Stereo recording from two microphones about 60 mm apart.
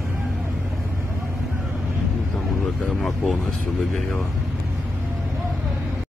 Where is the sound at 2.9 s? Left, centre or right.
Centre.